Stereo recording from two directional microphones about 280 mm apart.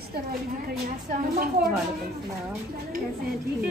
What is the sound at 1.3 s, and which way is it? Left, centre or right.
Speech, right.